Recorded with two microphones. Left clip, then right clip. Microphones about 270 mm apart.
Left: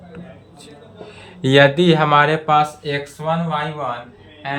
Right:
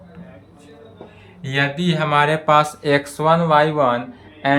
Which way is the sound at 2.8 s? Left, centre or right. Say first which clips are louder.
Right 6 dB; centre.